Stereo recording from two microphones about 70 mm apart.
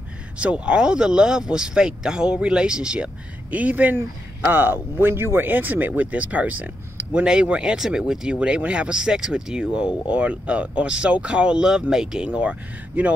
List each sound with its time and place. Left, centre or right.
0.4 s speech: centre